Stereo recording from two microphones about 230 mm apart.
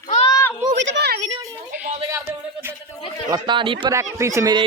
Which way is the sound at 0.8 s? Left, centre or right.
Right.